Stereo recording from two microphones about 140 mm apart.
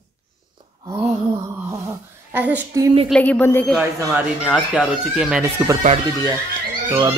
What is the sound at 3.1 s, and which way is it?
Speech, 10° left (ahead or behind).